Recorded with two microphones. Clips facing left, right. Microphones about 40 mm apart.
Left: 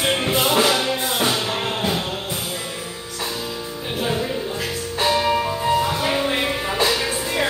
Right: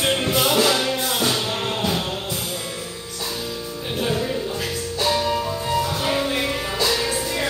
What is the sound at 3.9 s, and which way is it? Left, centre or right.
Music, centre.